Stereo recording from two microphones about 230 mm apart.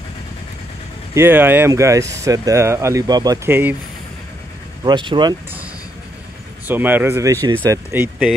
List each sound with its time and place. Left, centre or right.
1.1 s speech: centre
4.8 s speech: centre
6.7 s speech: centre